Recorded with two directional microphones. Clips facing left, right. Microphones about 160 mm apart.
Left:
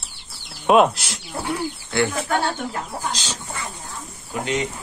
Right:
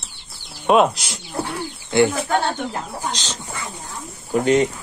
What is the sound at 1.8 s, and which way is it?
Bird, 20° right (ahead or behind).